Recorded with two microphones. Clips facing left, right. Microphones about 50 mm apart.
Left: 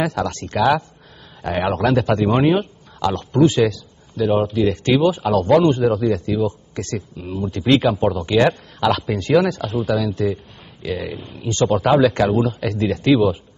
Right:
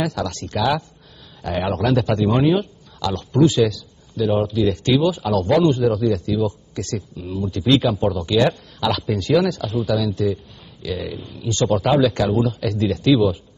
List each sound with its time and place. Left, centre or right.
0.0 s a man's voice: left